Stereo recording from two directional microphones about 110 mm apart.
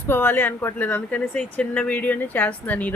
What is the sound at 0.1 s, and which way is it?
A woman's voice, 20° left (ahead or behind).